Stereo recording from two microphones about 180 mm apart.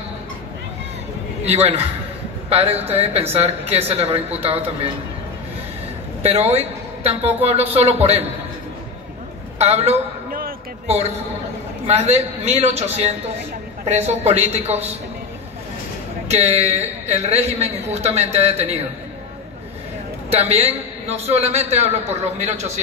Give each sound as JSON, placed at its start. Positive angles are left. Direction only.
{"t": 1.4, "sound": "a man's voice", "side_deg": -35}
{"t": 6.2, "sound": "a woman's voice", "side_deg": -35}
{"t": 9.6, "sound": "a woman's voice", "side_deg": -35}
{"t": 11.9, "sound": "a woman's voice", "side_deg": -35}
{"t": 16.3, "sound": "a woman's voice", "side_deg": -35}
{"t": 20.2, "sound": "a woman's voice", "side_deg": -35}